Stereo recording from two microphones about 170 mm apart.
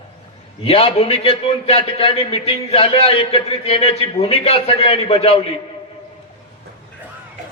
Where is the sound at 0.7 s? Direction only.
35° left (ahead or behind).